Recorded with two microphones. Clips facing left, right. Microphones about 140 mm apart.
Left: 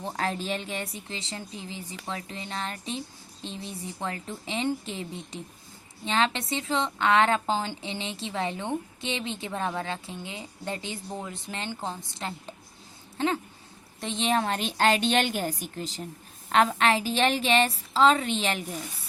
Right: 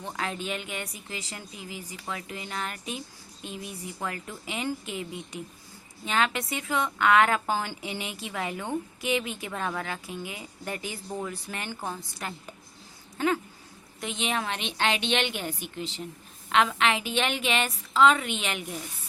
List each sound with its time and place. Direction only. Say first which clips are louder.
0.0 s a woman's voice: left 3 dB; 35° left (ahead or behind)
6.1 s a woman's voice: left 1 dB; 30° left (ahead or behind)